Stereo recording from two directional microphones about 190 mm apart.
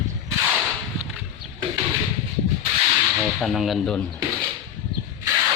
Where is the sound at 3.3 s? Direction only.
Centre (ahead or behind).